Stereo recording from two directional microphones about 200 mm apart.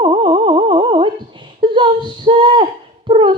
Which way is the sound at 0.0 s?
25° right (ahead or behind).